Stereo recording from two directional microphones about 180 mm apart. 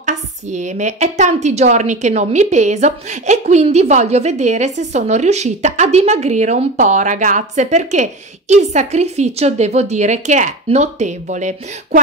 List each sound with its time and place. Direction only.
0.0 s a woman's voice: 40° right (ahead or behind)